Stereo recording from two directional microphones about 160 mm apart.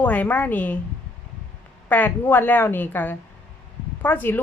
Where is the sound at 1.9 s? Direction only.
10° left (ahead or behind).